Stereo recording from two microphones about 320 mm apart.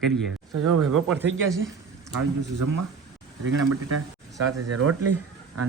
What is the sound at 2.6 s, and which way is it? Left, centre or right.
Speech, right.